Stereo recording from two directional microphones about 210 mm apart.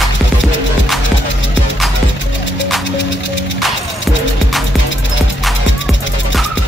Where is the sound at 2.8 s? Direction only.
60° left (ahead or behind).